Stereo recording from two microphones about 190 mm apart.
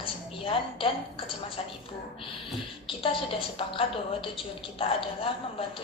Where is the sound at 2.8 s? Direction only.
30° left (ahead or behind).